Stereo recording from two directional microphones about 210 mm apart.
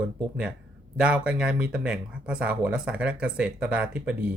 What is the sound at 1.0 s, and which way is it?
Speech, 5° right (ahead or behind).